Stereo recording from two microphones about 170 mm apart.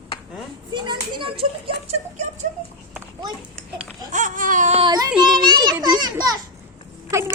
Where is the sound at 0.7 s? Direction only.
25° right (ahead or behind).